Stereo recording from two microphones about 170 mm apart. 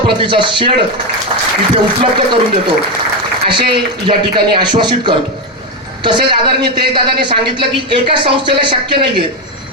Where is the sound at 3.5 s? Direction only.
30° right (ahead or behind).